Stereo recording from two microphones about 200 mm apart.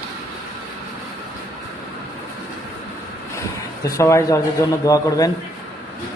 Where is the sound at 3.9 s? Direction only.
15° left (ahead or behind).